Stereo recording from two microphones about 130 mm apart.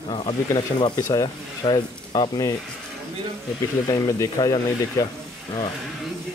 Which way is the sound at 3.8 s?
30° left (ahead or behind).